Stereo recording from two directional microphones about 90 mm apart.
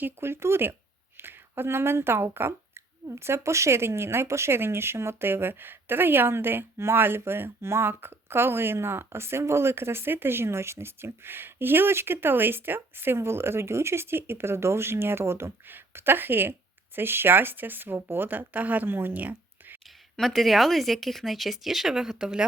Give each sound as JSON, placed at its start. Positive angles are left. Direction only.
{"t": 0.0, "sound": "a woman's voice", "side_deg": -25}
{"t": 20.1, "sound": "speech", "side_deg": 0}